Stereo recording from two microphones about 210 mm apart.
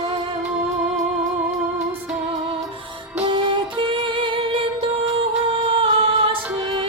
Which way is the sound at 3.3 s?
25° right (ahead or behind).